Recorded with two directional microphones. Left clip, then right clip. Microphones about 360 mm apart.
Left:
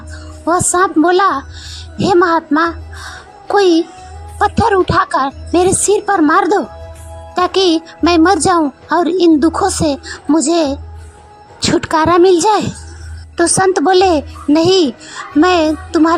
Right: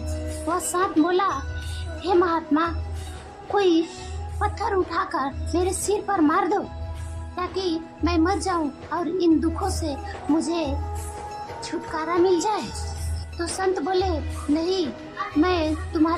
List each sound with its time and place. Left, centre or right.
0.4 s speech: centre